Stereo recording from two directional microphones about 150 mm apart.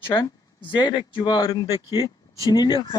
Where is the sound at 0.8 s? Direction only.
30° left (ahead or behind).